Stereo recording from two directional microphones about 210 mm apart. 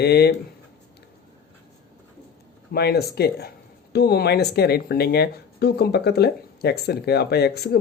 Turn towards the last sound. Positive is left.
turn(degrees=50)  # may be behind; listen again after turning